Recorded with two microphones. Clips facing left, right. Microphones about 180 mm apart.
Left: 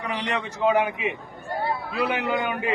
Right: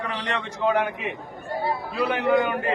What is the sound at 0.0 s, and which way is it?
A man's voice, 10° left (ahead or behind).